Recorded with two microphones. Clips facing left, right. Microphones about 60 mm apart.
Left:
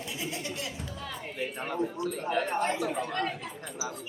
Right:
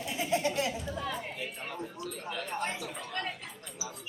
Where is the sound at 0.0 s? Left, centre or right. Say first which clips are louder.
Right 6 dB; right.